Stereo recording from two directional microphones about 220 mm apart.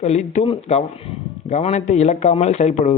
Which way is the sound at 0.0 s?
30° left (ahead or behind).